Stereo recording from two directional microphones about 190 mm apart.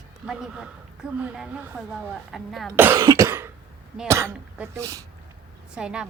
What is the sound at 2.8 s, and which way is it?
Speech, 15° right (ahead or behind).